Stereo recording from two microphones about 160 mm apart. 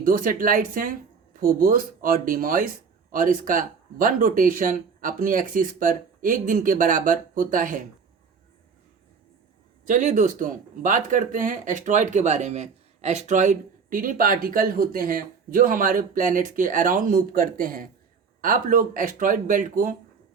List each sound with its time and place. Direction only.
0.0 s speech: 60° right (ahead or behind)
9.8 s speech: 55° right (ahead or behind)